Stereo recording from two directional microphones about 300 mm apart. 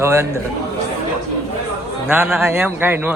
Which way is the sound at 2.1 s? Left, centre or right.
Centre.